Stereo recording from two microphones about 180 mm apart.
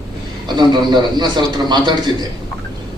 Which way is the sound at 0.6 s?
25° right (ahead or behind).